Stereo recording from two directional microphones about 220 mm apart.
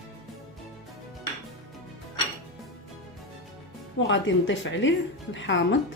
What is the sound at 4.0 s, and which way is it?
Speech, 55° left (ahead or behind).